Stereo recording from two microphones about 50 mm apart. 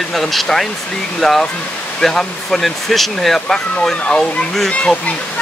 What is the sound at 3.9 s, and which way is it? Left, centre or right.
Speech, left.